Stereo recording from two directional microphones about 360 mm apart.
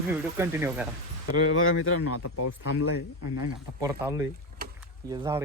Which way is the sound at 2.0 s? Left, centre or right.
Left.